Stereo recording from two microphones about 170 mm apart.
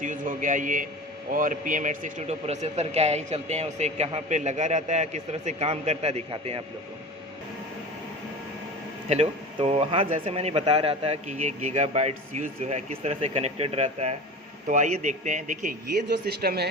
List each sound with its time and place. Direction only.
0.0 s a man's voice: 50° right (ahead or behind)
9.0 s a man's voice: 40° right (ahead or behind)
16.0 s speech: 80° right